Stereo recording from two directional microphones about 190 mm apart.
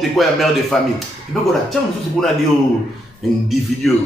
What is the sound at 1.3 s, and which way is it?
Speech, 5° left (ahead or behind).